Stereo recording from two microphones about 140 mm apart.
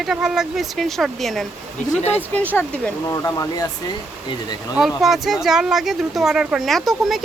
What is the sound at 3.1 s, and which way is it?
Speech, 25° left (ahead or behind).